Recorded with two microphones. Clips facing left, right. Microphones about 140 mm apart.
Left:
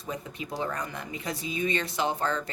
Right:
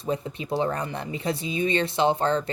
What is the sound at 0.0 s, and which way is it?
Speech, 30° right (ahead or behind).